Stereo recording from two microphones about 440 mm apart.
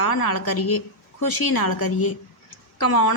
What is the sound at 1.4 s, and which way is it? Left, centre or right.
Speech, left.